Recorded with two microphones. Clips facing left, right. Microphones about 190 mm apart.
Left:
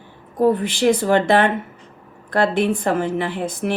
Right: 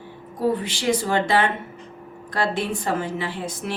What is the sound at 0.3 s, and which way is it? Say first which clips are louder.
Speech: left 6 dB; 55° left (ahead or behind).